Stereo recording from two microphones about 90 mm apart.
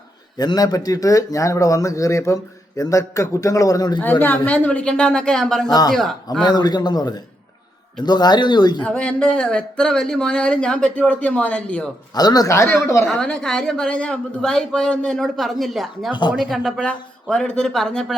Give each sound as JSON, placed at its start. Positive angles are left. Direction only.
{"t": 0.3, "sound": "a man's voice", "side_deg": 45}
{"t": 4.0, "sound": "a woman's voice", "side_deg": 20}
{"t": 5.6, "sound": "speech", "side_deg": 45}
{"t": 8.8, "sound": "a woman's voice", "side_deg": 10}
{"t": 12.1, "sound": "speech", "side_deg": 45}
{"t": 12.5, "sound": "speech", "side_deg": 25}
{"t": 13.1, "sound": "a woman's voice", "side_deg": 5}